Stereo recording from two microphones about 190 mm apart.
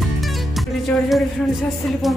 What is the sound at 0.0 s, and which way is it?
Music, centre (ahead or behind).